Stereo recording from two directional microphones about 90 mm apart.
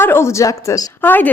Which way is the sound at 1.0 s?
20° left (ahead or behind).